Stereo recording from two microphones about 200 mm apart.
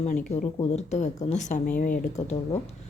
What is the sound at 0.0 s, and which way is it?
Speech, 40° left (ahead or behind).